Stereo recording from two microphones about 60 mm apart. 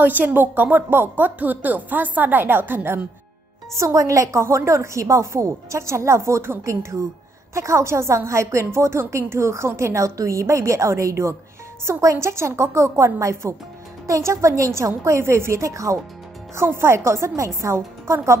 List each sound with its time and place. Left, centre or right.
0.0 s speech: right
3.7 s a woman's voice: right
16.5 s a woman's voice: right